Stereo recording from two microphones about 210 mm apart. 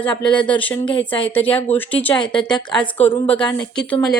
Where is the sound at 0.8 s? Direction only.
25° left (ahead or behind).